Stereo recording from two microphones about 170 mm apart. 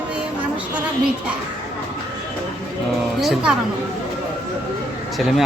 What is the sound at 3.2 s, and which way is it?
Speech, centre (ahead or behind).